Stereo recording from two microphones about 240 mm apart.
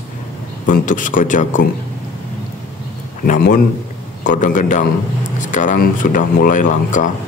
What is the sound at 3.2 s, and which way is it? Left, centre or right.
Speech, left.